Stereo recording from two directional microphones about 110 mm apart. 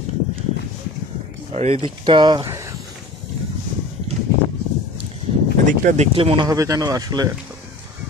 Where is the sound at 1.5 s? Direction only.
75° right (ahead or behind).